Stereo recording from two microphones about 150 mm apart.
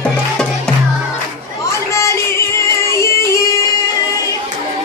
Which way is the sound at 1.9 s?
20° left (ahead or behind).